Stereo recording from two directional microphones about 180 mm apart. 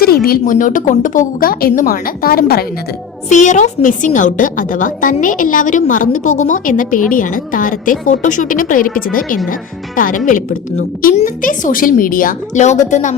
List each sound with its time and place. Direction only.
0.0 s a woman's voice: 55° left (ahead or behind)
3.2 s a woman's voice: 40° left (ahead or behind)